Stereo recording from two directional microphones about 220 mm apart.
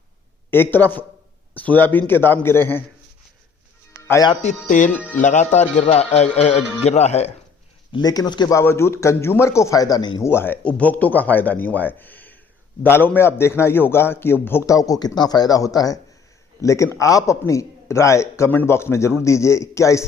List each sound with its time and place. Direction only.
0.5 s a man's voice: 10° left (ahead or behind)
4.0 s speech: 15° left (ahead or behind)
5.2 s a man's voice: 35° left (ahead or behind)
7.9 s a man's voice: 15° left (ahead or behind)